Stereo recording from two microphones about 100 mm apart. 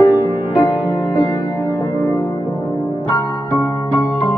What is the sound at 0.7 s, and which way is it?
Music, 20° right (ahead or behind).